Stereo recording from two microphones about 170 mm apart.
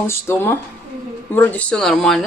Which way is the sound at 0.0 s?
15° left (ahead or behind).